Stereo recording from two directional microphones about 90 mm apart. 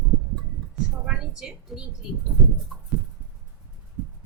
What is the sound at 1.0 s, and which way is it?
Speech, 5° right (ahead or behind).